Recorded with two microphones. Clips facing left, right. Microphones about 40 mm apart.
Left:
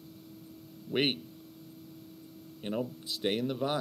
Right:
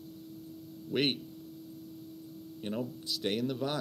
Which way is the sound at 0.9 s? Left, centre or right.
Centre.